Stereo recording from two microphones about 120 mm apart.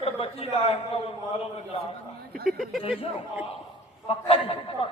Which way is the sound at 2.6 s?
Centre (ahead or behind).